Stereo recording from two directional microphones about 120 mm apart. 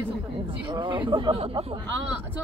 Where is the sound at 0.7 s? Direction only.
45° right (ahead or behind).